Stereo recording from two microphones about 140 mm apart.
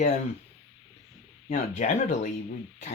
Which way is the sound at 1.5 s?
55° left (ahead or behind).